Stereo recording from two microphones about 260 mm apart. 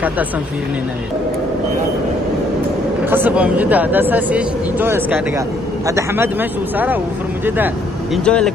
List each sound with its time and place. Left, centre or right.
3.1 s speech: centre
7.4 s speech: centre